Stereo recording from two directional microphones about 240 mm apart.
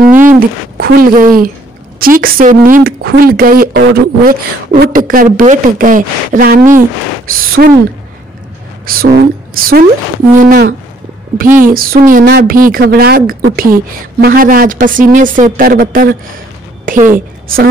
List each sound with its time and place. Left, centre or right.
0.0 s a woman's voice: right
8.8 s a woman's voice: right
16.8 s a sound: right